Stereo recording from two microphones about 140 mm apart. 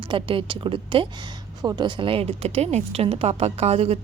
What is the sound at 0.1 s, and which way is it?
A woman's voice, 40° right (ahead or behind).